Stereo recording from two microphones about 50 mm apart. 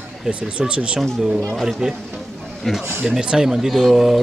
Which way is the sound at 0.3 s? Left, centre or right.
Right.